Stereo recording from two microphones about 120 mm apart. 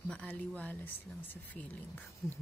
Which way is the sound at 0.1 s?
10° left (ahead or behind).